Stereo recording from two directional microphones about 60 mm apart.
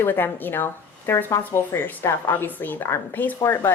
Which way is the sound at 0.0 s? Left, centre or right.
Left.